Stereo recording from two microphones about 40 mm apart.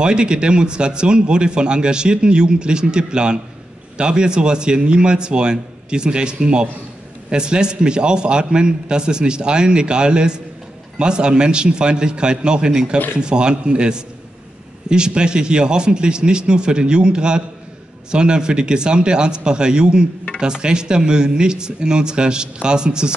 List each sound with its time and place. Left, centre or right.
0.0 s speech: right